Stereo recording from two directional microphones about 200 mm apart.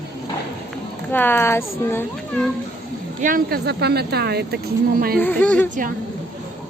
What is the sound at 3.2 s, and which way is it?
Speech, 45° right (ahead or behind).